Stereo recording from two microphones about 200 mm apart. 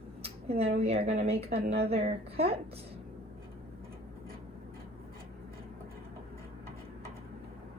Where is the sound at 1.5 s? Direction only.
50° right (ahead or behind).